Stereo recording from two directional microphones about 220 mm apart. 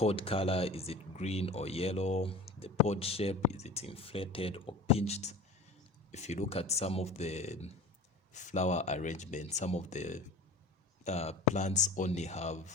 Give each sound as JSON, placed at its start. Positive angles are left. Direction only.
{"t": 0.0, "sound": "speech", "side_deg": 25}